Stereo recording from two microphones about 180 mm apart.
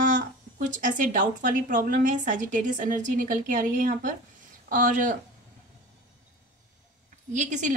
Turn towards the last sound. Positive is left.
turn(degrees=-45)  # may be behind; listen again after turning